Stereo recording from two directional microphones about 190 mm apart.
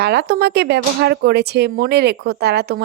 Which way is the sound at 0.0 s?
60° right (ahead or behind).